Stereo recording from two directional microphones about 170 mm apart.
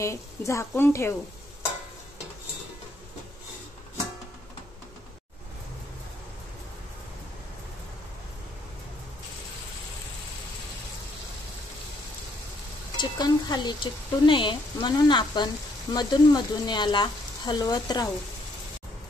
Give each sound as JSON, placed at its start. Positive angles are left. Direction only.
{"t": 0.0, "sound": "a woman's voice", "side_deg": 15}
{"t": 12.9, "sound": "speech", "side_deg": 25}